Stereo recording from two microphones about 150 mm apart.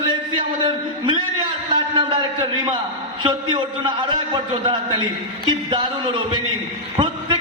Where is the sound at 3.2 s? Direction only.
30° right (ahead or behind).